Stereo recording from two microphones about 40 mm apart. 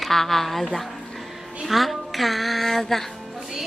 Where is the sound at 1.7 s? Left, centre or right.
Centre.